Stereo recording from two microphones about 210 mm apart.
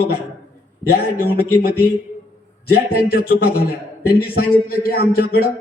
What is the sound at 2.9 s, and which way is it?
Speech, 45° left (ahead or behind).